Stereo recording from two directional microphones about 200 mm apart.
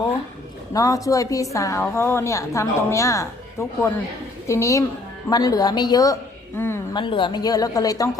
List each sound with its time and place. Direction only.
0.7 s a woman's voice: 15° left (ahead or behind)
6.9 s a woman's voice: 25° left (ahead or behind)